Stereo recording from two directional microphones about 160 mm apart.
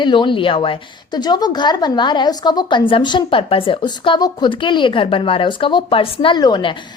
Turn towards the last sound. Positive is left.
turn(degrees=30)  # may be behind; listen again after turning